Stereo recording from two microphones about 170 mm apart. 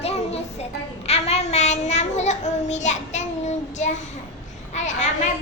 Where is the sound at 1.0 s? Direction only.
40° left (ahead or behind).